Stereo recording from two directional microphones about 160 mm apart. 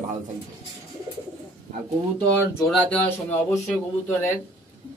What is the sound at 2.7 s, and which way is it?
Speech, 10° left (ahead or behind).